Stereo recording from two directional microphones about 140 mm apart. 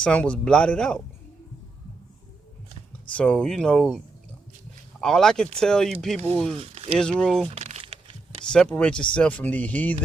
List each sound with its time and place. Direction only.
0.0 s speech: 10° left (ahead or behind)
3.1 s speech: 10° left (ahead or behind)
6.1 s speech: 45° right (ahead or behind)
7.2 s speech: centre (ahead or behind)
7.4 s crumpling: 50° right (ahead or behind)
7.8 s a sound: 40° right (ahead or behind)
8.4 s speech: 5° left (ahead or behind)